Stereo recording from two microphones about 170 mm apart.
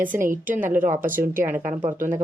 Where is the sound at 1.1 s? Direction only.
15° right (ahead or behind).